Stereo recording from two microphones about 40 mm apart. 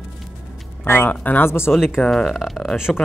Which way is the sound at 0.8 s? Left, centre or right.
Left.